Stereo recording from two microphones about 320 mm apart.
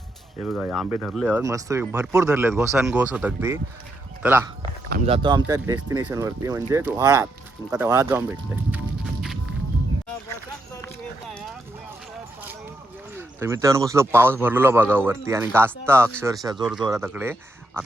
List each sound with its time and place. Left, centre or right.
0.4 s speech: centre
13.1 s speech: centre